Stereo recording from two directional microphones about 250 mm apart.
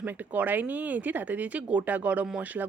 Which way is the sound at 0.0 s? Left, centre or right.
Centre.